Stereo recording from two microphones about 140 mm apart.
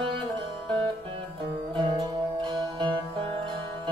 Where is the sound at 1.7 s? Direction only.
35° right (ahead or behind).